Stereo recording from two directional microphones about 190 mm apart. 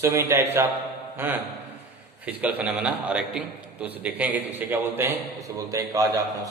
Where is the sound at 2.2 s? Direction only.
5° right (ahead or behind).